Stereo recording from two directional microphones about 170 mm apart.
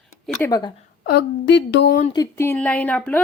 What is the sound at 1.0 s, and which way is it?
Speech, 80° left.